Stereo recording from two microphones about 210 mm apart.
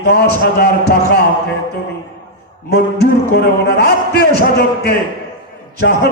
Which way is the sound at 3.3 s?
50° left (ahead or behind).